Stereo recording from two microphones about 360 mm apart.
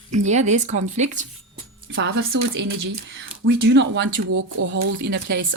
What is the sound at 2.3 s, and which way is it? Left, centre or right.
Speech, right.